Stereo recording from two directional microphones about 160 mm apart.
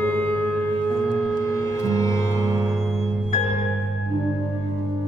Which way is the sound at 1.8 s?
20° left (ahead or behind).